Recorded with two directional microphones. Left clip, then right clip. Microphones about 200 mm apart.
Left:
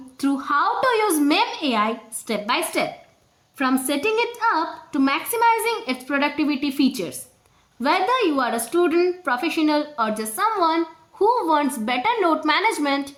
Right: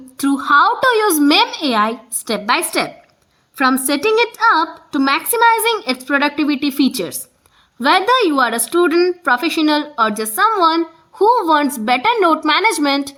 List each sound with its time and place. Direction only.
0.2 s a woman's voice: 40° right (ahead or behind)